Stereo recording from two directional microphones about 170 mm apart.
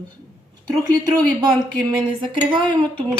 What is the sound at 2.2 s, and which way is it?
Dishes, 10° left (ahead or behind).